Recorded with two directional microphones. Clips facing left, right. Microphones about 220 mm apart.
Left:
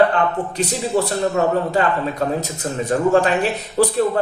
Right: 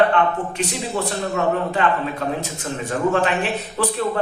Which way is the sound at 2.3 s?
40° left (ahead or behind).